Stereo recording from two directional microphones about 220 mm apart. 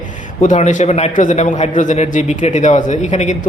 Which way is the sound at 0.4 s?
35° left (ahead or behind).